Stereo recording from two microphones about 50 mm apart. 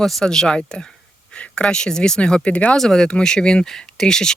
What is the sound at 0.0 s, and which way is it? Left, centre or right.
Speech, centre.